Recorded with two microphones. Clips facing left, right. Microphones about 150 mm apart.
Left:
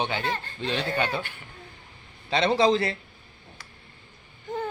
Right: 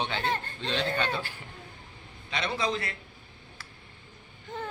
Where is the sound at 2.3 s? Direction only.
30° left (ahead or behind).